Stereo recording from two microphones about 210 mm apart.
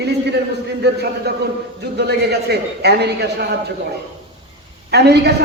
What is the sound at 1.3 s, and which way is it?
A man's voice, 50° right (ahead or behind).